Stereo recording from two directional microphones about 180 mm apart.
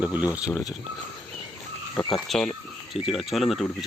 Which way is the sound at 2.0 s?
Centre (ahead or behind).